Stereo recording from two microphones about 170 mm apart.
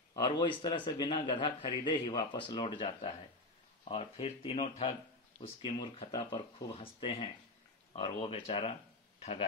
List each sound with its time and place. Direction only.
0.1 s a man's voice: 25° left (ahead or behind)